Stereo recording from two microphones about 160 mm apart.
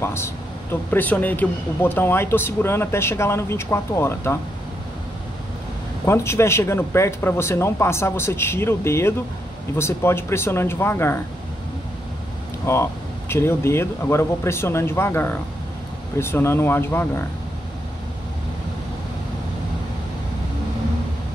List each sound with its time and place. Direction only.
0.0 s speech: 15° left (ahead or behind)
6.0 s speech: 15° left (ahead or behind)
12.6 s speech: 15° left (ahead or behind)